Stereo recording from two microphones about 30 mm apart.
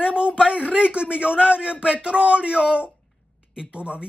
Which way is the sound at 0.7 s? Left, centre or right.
Right.